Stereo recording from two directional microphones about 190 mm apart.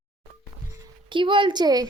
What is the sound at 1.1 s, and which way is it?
Speech, 25° right (ahead or behind).